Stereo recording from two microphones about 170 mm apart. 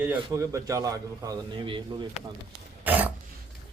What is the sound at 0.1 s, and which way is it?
A man's voice, 15° right (ahead or behind).